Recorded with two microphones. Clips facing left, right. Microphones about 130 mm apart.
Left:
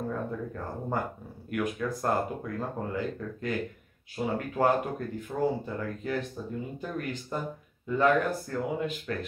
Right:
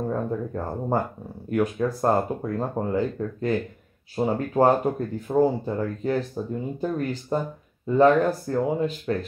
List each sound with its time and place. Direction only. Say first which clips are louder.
0.1 s speech: right 6 dB; 35° right (ahead or behind)